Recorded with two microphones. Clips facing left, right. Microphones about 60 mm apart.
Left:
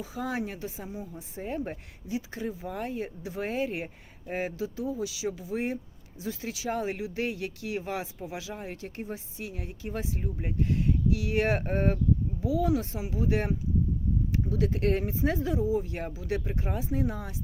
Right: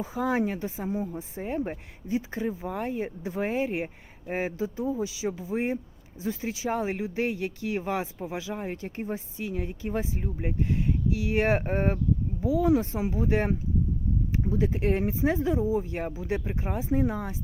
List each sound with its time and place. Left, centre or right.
0.0 s speech: right